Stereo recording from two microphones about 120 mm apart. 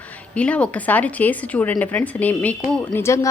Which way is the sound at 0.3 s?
10° left (ahead or behind).